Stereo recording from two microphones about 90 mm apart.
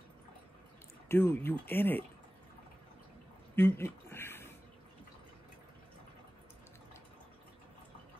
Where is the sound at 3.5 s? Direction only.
25° left (ahead or behind).